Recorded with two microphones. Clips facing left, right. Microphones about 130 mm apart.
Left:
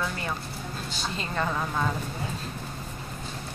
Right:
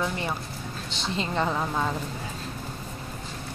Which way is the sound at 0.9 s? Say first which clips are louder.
Right 4 dB; 25° right (ahead or behind).